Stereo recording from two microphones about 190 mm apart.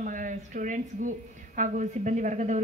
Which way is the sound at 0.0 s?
45° right (ahead or behind).